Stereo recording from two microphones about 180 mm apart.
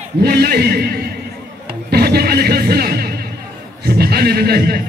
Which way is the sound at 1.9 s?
60° right (ahead or behind).